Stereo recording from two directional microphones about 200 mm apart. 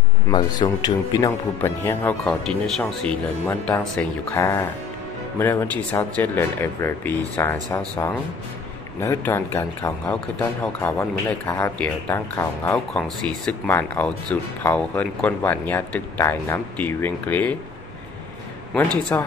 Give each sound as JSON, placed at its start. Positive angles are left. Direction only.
{"t": 0.3, "sound": "speech", "side_deg": 20}
{"t": 5.9, "sound": "speech", "side_deg": 10}
{"t": 19.1, "sound": "speech", "side_deg": 15}